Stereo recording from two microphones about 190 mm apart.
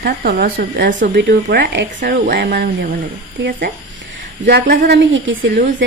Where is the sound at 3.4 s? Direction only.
70° right (ahead or behind).